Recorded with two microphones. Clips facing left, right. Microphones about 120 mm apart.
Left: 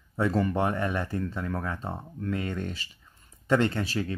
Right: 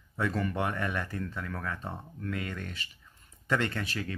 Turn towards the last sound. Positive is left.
turn(degrees=30)  # may be behind; listen again after turning